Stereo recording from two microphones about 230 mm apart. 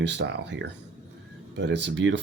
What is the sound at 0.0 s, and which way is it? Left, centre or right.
Speech, right.